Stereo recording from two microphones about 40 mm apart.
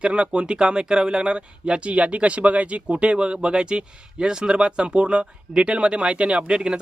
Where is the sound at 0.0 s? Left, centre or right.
Right.